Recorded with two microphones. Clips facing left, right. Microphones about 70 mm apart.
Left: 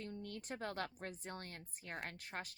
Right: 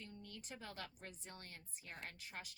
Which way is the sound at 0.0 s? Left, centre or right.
Left.